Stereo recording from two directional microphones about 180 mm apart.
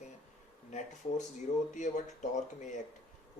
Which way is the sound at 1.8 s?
40° left (ahead or behind).